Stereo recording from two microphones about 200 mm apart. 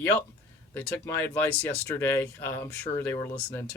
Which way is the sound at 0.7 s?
10° left (ahead or behind).